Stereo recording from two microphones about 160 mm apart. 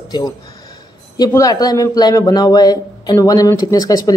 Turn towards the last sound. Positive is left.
turn(degrees=25)  # may be behind; listen again after turning